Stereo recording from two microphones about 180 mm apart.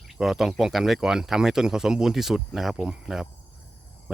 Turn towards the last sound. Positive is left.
turn(degrees=-5)  # may be behind; listen again after turning